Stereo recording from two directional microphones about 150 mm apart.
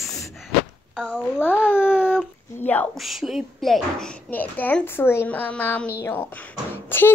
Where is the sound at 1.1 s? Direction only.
10° left (ahead or behind).